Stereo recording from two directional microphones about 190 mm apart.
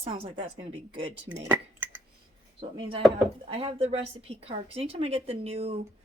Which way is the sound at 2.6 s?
30° right (ahead or behind).